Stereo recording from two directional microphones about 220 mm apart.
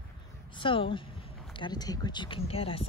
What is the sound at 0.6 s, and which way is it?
Speech, 25° left (ahead or behind).